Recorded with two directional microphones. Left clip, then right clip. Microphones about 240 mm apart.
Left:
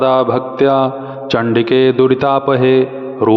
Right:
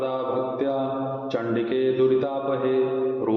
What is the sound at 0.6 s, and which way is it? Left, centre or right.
Speech, left.